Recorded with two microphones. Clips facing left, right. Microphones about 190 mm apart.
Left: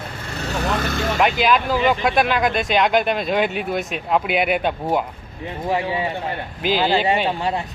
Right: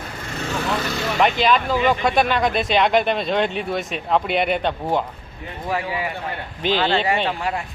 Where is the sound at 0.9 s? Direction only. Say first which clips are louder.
Left 2 dB; 50° left (ahead or behind).